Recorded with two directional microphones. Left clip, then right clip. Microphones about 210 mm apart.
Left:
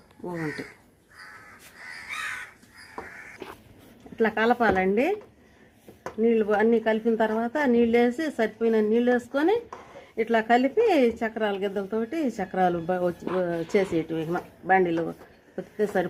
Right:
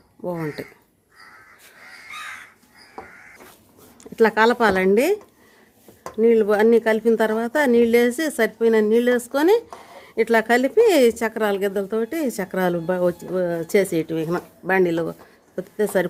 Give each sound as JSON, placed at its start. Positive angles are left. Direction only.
{"t": 4.2, "sound": "a woman's voice", "side_deg": -60}
{"t": 6.2, "sound": "speech", "side_deg": -50}